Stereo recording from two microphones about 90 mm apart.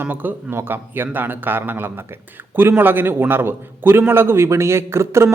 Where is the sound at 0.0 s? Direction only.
20° right (ahead or behind).